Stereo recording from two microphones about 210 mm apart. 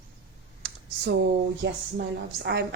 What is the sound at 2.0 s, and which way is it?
Speech, 50° right (ahead or behind).